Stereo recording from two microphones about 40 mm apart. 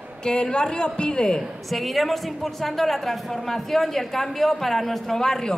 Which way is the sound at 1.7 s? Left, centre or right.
Centre.